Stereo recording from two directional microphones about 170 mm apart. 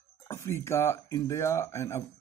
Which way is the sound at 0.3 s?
15° left (ahead or behind).